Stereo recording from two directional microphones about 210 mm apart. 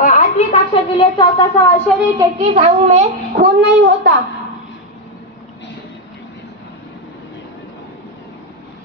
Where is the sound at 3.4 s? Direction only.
55° right (ahead or behind).